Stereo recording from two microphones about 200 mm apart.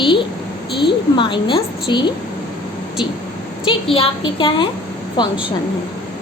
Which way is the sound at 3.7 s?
25° left (ahead or behind).